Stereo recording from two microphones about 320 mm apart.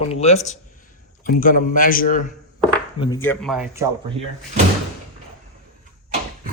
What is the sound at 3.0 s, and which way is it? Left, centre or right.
Speech, centre.